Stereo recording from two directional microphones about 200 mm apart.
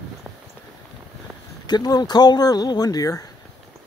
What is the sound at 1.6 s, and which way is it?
Speech, 20° left (ahead or behind).